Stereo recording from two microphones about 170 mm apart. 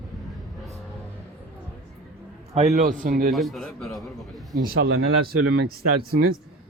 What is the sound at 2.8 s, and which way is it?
Speech, 60° right (ahead or behind).